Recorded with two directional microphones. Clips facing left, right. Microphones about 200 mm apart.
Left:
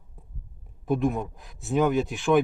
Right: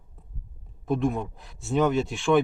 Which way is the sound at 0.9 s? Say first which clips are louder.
Left 1 dB; centre (ahead or behind).